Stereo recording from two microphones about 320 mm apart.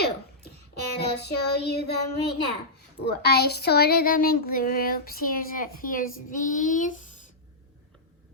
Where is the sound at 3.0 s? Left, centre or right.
Left.